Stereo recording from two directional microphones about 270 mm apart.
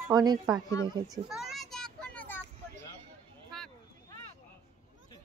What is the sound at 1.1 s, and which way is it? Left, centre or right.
Vehicle, centre.